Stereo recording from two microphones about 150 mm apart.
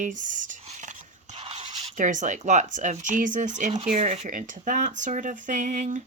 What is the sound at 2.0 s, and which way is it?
Speech, 55° right (ahead or behind).